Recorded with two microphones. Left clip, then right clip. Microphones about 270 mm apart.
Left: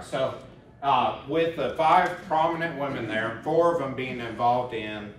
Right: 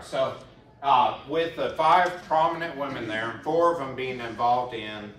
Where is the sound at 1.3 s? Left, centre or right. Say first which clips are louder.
Left 1 dB; centre.